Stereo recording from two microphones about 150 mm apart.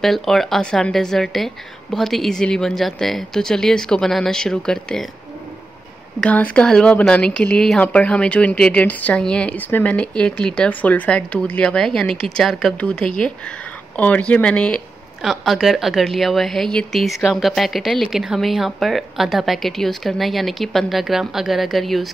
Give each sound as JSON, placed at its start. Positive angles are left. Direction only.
{"t": 0.0, "sound": "speech", "side_deg": 0}
{"t": 6.2, "sound": "speech", "side_deg": 5}